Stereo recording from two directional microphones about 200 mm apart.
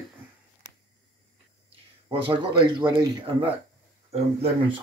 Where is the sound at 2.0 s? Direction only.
25° right (ahead or behind).